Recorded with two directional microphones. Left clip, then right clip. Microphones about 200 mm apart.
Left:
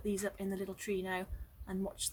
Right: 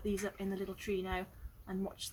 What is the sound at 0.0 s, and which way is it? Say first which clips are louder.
A woman's voice: left 1 dB; 15° left (ahead or behind).